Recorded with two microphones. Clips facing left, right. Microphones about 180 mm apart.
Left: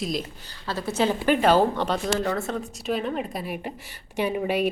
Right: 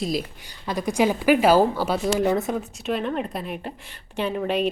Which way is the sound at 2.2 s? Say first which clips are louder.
Right 5 dB; 20° right (ahead or behind).